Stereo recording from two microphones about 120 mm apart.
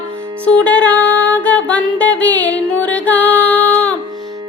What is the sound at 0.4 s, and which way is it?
Music, 10° left (ahead or behind).